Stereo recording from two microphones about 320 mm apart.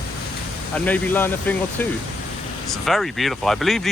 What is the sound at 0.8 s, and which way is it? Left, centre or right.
Speech, centre.